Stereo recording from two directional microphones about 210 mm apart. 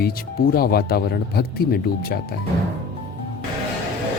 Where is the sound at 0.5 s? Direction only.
45° left (ahead or behind).